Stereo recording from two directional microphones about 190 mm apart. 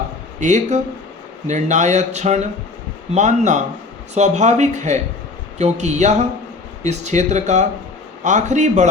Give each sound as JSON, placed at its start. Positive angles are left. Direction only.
{"t": 0.3, "sound": "speech", "side_deg": -40}